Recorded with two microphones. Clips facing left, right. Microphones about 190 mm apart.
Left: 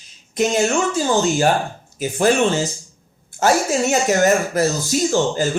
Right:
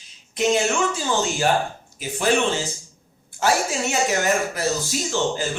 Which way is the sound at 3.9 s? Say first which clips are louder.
Left 6 dB; 45° left (ahead or behind).